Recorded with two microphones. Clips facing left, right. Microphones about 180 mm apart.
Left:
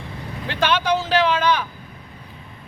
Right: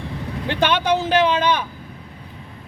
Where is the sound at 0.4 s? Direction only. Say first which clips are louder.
Right 1 dB; 20° right (ahead or behind).